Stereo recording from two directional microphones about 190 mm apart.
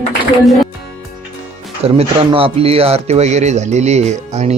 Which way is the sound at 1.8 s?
30° right (ahead or behind).